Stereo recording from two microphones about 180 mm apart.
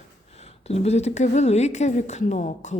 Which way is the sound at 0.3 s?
35° left (ahead or behind).